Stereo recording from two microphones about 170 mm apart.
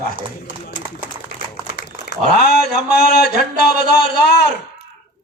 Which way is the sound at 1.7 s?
70° left (ahead or behind).